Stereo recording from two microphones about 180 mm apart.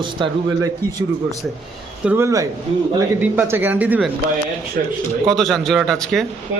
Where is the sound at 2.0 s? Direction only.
10° right (ahead or behind).